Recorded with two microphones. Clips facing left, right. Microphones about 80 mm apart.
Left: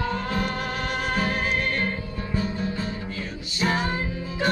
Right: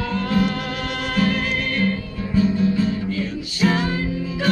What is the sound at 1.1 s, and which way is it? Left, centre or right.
Music, left.